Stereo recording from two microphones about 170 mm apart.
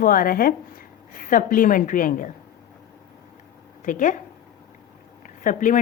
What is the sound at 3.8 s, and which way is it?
Speech, 50° left (ahead or behind).